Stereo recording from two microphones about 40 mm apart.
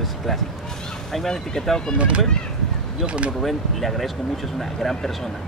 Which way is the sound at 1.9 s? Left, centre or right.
Right.